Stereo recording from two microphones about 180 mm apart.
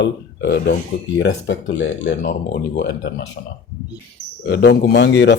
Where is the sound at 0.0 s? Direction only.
65° left (ahead or behind).